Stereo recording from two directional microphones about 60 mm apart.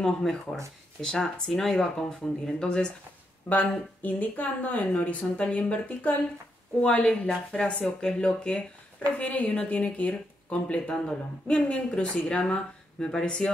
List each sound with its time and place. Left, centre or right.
0.0 s speech: centre
3.4 s speech: left
9.2 s speech: left; by 13.5 s centre